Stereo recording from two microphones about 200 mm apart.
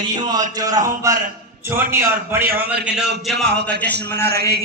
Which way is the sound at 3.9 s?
55° right (ahead or behind).